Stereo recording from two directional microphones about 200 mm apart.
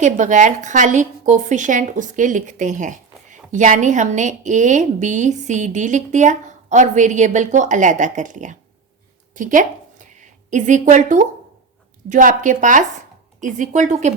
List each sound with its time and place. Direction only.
0.0 s speech: 40° right (ahead or behind)
9.3 s a sound: 40° right (ahead or behind)
10.5 s speech: 40° right (ahead or behind)